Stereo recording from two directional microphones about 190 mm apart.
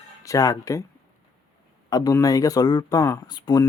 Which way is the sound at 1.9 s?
20° left (ahead or behind).